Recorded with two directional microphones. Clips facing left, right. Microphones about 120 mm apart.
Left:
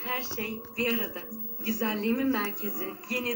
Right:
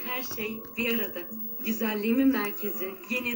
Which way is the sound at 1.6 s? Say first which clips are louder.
Right 1 dB; 25° left (ahead or behind).